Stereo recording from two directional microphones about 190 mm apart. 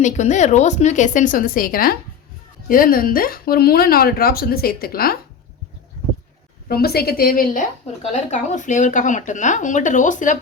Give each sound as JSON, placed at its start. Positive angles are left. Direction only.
{"t": 0.0, "sound": "speech", "side_deg": 40}
{"t": 6.7, "sound": "speech", "side_deg": 55}
{"t": 8.1, "sound": "speech", "side_deg": 40}